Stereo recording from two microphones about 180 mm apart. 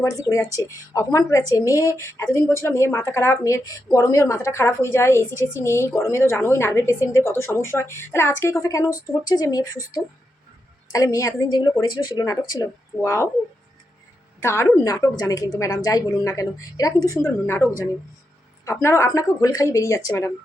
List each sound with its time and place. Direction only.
0.0 s a woman's voice: 15° left (ahead or behind)
10.9 s a woman's voice: 20° left (ahead or behind)
14.4 s a woman's voice: 15° left (ahead or behind)